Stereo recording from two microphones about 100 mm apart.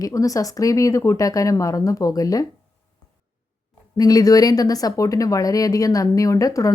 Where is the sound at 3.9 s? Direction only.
35° left (ahead or behind).